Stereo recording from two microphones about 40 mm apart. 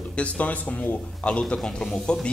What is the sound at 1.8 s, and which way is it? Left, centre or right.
Speech, left.